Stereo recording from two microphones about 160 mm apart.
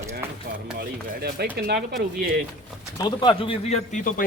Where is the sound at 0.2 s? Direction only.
15° right (ahead or behind).